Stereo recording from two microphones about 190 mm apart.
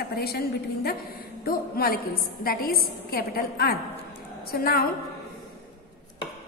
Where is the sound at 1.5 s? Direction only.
50° left (ahead or behind).